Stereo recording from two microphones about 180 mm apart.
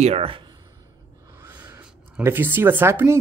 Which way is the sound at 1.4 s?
15° right (ahead or behind).